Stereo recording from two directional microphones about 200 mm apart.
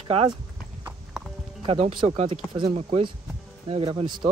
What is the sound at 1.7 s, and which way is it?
Speech, 30° right (ahead or behind).